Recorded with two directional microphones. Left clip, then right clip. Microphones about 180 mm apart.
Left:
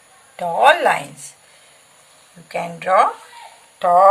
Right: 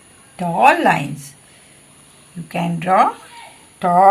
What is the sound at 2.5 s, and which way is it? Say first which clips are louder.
Female singing: right 1 dB; 25° left (ahead or behind).